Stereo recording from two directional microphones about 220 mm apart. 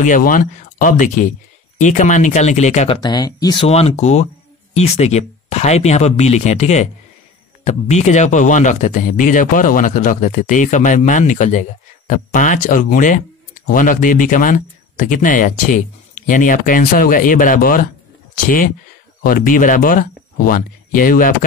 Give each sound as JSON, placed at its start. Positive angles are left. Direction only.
{"t": 0.0, "sound": "speech", "side_deg": 35}
{"t": 3.0, "sound": "speech", "side_deg": 20}
{"t": 19.2, "sound": "speech", "side_deg": 40}